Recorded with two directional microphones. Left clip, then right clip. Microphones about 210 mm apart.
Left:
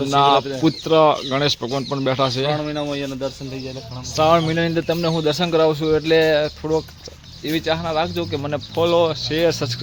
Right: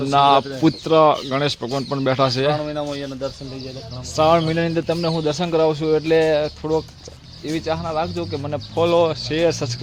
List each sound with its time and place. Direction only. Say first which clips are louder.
0.1 s speech: right 1 dB; 5° right (ahead or behind)
2.6 s a man's voice: left 1 dB; 50° left (ahead or behind)
4.1 s speech: even; centre (ahead or behind)